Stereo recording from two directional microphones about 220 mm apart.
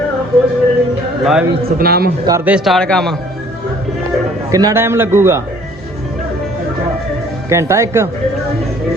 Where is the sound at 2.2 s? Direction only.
10° right (ahead or behind).